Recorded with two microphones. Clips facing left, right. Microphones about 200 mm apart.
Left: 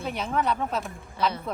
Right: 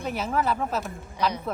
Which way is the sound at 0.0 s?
Centre (ahead or behind).